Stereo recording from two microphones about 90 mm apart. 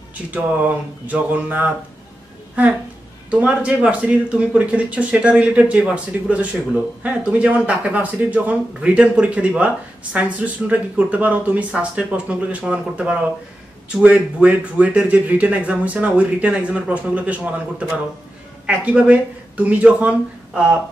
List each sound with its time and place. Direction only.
0.3 s speech: 15° right (ahead or behind)
3.3 s speech: 15° right (ahead or behind)